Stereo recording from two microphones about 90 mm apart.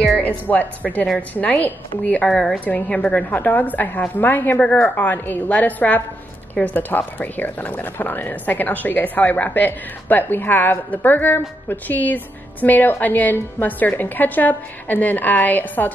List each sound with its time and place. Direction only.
0.2 s speech: 20° left (ahead or behind)
2.2 s a woman's voice: 5° left (ahead or behind)